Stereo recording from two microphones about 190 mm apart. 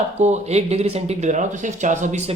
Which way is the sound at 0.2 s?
35° right (ahead or behind).